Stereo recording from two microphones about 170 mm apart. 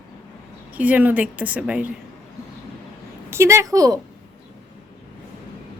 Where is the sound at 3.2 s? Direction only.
15° right (ahead or behind).